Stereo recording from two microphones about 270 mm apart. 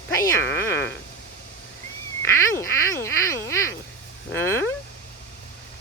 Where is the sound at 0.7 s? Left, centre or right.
Left.